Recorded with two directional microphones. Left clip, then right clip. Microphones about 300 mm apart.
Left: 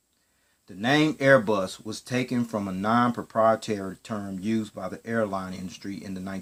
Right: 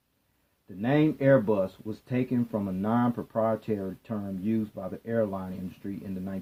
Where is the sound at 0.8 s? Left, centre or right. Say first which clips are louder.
Left 3 dB; centre.